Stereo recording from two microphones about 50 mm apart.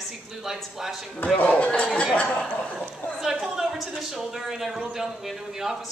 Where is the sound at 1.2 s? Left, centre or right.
Left.